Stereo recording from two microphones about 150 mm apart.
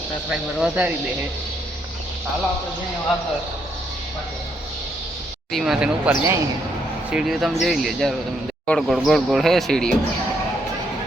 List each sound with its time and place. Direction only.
0.3 s speech: 10° right (ahead or behind)
5.5 s speech: centre (ahead or behind)
6.1 s speech: 15° right (ahead or behind)
7.1 s speech: 5° right (ahead or behind)